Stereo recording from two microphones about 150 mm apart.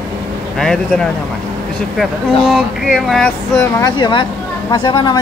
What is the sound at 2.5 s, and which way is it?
Speech, centre (ahead or behind).